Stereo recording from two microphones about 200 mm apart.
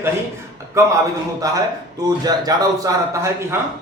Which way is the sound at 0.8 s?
15° right (ahead or behind).